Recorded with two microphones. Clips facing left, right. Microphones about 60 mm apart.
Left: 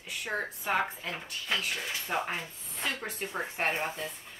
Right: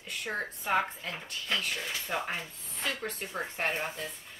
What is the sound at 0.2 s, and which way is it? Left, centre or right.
Speech, centre.